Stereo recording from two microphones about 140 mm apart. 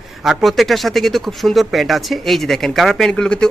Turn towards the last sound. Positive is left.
turn(degrees=5)  # may be behind; listen again after turning